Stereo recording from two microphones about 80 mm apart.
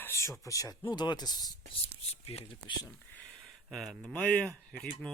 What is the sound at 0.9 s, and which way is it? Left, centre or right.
Speech, left.